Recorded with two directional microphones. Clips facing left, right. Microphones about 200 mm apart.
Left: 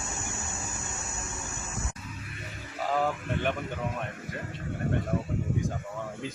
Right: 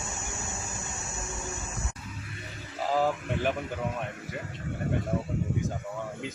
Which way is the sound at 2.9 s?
Centre (ahead or behind).